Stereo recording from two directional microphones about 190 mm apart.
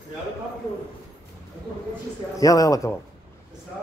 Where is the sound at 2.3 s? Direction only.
20° left (ahead or behind).